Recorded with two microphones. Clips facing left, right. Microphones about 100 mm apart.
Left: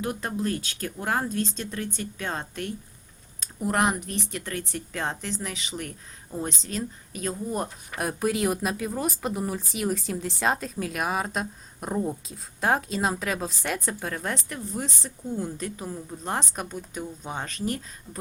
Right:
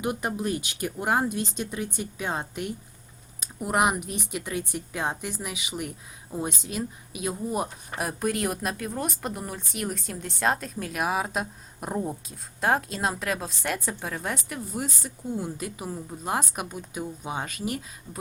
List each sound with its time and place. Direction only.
0.0 s speech: 15° right (ahead or behind)